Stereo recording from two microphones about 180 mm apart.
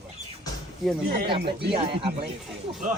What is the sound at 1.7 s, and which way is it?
Speech, 30° right (ahead or behind).